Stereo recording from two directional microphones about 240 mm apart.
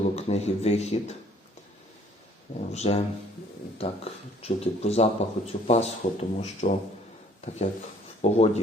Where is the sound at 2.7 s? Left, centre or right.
Left.